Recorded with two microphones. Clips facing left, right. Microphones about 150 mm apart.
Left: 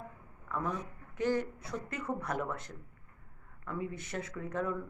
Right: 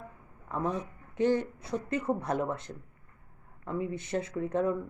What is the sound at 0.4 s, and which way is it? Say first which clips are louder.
Speech: right 4 dB; 25° right (ahead or behind).